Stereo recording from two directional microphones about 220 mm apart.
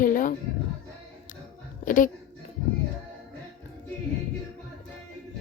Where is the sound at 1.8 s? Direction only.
35° left (ahead or behind).